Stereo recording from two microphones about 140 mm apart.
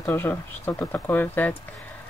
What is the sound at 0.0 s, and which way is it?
Speech, 15° left (ahead or behind).